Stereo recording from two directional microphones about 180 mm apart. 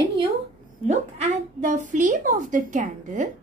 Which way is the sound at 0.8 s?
40° right (ahead or behind).